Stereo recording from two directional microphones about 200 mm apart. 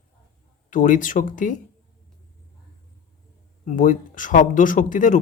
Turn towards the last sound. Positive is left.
turn(degrees=40)  # may be behind; listen again after turning